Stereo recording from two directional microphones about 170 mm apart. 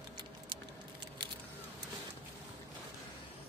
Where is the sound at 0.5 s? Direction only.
30° right (ahead or behind).